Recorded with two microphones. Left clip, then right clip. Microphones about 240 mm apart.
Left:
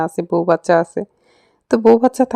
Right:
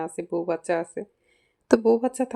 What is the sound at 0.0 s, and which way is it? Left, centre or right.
Speech, left.